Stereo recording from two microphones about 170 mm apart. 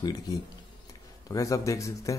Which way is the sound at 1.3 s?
20° left (ahead or behind).